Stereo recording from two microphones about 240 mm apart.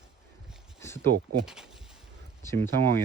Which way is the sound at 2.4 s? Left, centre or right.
Centre.